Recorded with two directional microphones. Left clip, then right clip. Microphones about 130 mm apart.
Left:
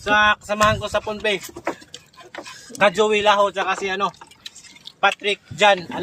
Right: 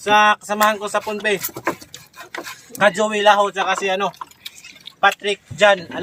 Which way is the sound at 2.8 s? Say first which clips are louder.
Right 1 dB; 20° left (ahead or behind).